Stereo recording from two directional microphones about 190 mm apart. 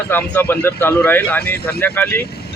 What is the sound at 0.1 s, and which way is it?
A man's voice, 10° left (ahead or behind).